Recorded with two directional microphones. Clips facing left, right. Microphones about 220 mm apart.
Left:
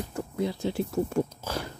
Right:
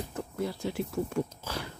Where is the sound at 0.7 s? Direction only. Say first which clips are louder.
Left 4 dB; 40° left (ahead or behind).